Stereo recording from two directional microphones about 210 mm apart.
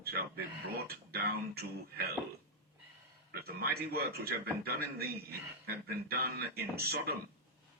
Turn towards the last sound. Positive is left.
turn(degrees=-45)  # may be behind; listen again after turning